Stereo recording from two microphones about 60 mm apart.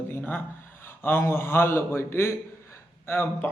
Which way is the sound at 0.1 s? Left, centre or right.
Left.